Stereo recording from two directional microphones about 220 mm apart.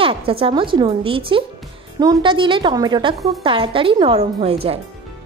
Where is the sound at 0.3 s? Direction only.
25° right (ahead or behind).